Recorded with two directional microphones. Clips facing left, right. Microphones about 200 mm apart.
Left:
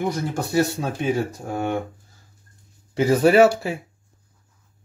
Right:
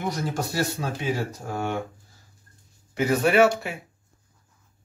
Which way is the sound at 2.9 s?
30° left (ahead or behind).